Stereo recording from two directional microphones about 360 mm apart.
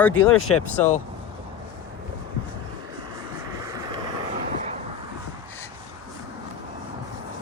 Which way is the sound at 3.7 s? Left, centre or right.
Centre.